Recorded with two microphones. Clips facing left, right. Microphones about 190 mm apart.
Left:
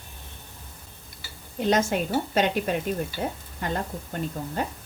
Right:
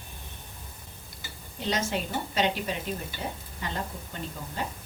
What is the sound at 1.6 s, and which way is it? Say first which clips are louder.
A woman's voice: left 6 dB; 50° left (ahead or behind).